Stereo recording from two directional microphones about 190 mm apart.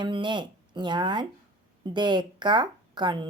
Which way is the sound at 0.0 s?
25° right (ahead or behind).